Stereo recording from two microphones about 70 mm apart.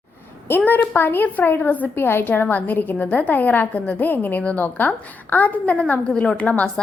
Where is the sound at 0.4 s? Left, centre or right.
Left.